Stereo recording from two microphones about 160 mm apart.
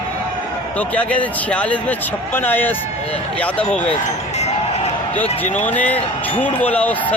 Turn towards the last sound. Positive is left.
turn(degrees=10)  # may be behind; listen again after turning